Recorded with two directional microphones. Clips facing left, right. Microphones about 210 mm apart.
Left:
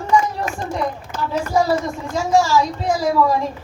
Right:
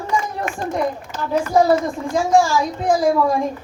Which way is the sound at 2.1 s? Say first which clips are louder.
Even; 50° right (ahead or behind).